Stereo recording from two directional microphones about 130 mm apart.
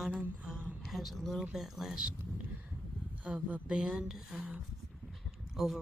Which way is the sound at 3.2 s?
10° right (ahead or behind).